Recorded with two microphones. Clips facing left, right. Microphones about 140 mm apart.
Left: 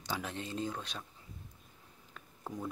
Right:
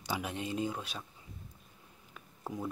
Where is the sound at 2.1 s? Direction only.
5° right (ahead or behind).